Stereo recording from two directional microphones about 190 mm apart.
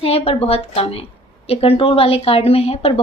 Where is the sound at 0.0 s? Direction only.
30° left (ahead or behind).